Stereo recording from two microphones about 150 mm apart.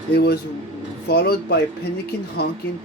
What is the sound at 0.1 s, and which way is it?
Speech, 90° left.